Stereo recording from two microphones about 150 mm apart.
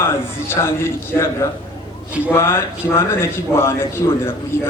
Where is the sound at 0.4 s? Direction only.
15° left (ahead or behind).